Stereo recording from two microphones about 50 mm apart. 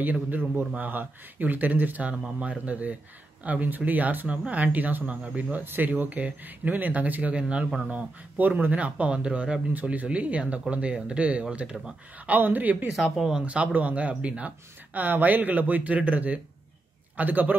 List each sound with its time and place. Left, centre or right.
0.0 s speech: right
5.6 s speech: right
8.4 s speech: right
9.8 s speech: right
12.3 s speech: right
12.9 s speech: centre
13.4 s speech: right